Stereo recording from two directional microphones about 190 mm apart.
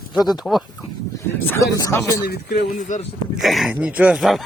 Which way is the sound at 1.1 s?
15° left (ahead or behind).